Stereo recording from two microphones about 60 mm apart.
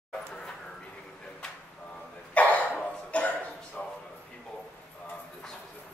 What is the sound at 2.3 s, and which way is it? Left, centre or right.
Cough, left.